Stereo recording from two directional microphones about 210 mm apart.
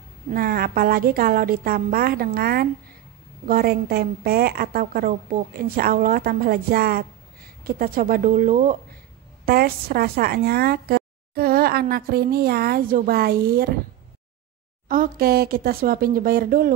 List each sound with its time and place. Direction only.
0.3 s speech: 45° right (ahead or behind)
14.9 s speech: 45° right (ahead or behind)